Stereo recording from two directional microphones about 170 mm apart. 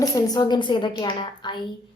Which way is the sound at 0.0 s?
25° left (ahead or behind).